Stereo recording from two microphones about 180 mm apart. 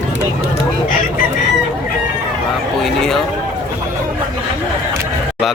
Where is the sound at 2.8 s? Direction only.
Centre (ahead or behind).